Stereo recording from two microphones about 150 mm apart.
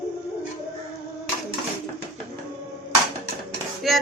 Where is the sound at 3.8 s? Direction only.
Centre (ahead or behind).